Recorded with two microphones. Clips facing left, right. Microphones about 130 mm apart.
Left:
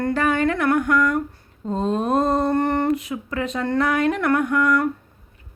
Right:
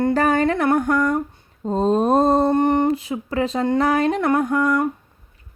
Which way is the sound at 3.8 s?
35° right (ahead or behind).